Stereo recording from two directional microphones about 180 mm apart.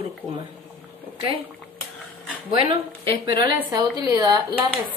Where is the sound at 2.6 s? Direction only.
30° right (ahead or behind).